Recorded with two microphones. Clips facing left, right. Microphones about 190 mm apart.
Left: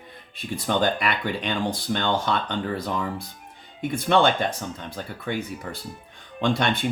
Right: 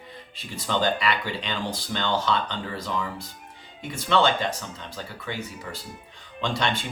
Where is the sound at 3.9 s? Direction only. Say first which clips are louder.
Left 2 dB; 55° left (ahead or behind).